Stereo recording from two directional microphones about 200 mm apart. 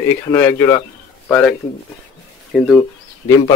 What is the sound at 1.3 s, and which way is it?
Speech, 5° left (ahead or behind).